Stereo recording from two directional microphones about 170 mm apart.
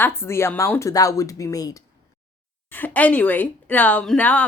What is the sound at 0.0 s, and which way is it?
Speech, 15° left (ahead or behind).